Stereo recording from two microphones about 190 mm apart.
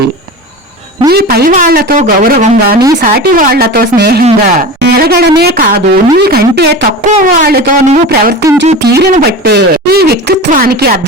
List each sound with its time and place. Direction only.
1.1 s speech: 55° right (ahead or behind)